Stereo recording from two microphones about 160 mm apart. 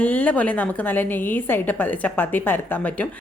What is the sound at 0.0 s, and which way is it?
A woman's voice, 10° left (ahead or behind).